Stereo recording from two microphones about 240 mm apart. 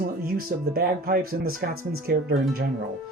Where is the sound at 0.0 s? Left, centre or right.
Right.